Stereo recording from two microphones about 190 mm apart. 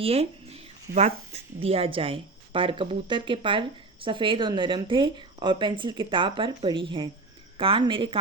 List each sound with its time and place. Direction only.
0.0 s a woman's voice: 30° right (ahead or behind)